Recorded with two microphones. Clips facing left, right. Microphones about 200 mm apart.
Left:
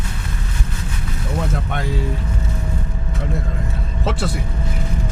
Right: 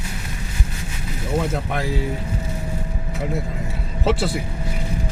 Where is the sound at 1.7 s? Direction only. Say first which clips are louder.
Even; centre (ahead or behind).